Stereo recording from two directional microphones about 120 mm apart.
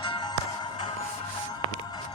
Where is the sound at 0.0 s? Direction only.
45° left (ahead or behind).